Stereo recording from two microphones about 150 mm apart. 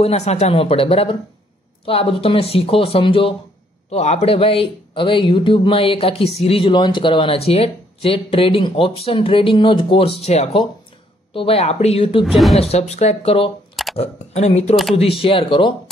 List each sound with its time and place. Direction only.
0.0 s speech: 45° left (ahead or behind)
12.2 s a woman's voice: centre (ahead or behind)
12.5 s speech: 45° left (ahead or behind)